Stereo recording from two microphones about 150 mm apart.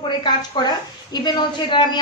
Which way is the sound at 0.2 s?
30° left (ahead or behind).